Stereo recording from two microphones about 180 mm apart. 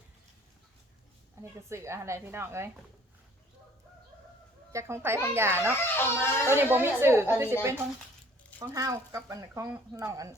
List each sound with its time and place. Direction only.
1.4 s speech: 15° right (ahead or behind)
4.7 s speech: 15° right (ahead or behind)
5.8 s speech: 10° left (ahead or behind)
6.5 s speech: 10° right (ahead or behind)